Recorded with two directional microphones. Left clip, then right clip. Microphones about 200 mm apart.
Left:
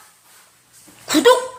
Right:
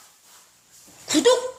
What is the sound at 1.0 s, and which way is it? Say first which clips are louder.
Speech: left 5 dB; centre (ahead or behind).